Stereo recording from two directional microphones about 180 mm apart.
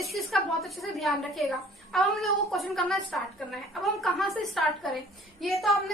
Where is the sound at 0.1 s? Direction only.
Centre (ahead or behind).